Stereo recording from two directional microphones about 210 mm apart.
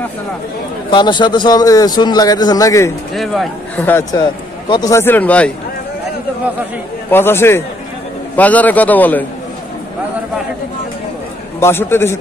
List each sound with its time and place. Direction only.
0.8 s a man's voice: 20° left (ahead or behind)
3.2 s a man's voice: 5° left (ahead or behind)
7.1 s a man's voice: 10° left (ahead or behind)
11.6 s a man's voice: 10° left (ahead or behind)